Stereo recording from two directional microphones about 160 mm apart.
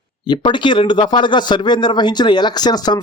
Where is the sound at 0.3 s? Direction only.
30° left (ahead or behind).